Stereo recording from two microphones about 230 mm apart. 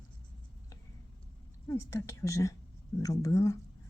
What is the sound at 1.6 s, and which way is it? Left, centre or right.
A woman's voice, centre.